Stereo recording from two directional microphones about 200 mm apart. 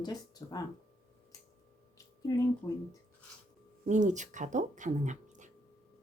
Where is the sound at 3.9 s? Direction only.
35° right (ahead or behind).